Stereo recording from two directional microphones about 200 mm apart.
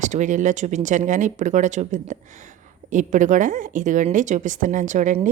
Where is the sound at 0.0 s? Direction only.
40° right (ahead or behind).